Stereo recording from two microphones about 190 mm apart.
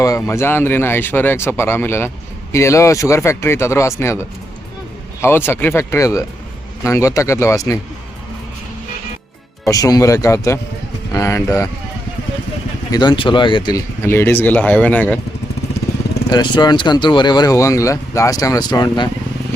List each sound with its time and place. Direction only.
0.2 s speech: 15° left (ahead or behind)
5.2 s speech: 10° left (ahead or behind)
9.6 s speech: 20° left (ahead or behind)
12.9 s speech: 25° left (ahead or behind)
16.3 s speech: 20° left (ahead or behind)